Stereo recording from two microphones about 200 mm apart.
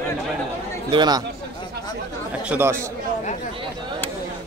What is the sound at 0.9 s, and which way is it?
Speech, 20° right (ahead or behind).